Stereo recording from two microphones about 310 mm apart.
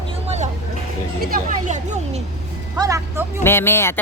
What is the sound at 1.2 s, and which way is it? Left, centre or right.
Speech, right.